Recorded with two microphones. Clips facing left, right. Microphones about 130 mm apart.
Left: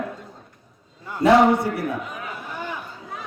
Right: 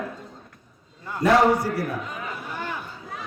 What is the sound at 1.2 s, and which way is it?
Speech, 25° left (ahead or behind).